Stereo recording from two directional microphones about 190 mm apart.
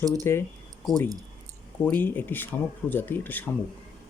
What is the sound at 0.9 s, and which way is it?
A man's voice, 5° left (ahead or behind).